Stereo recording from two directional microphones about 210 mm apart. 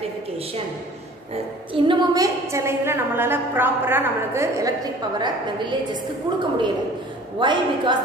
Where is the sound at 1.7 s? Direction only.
20° right (ahead or behind).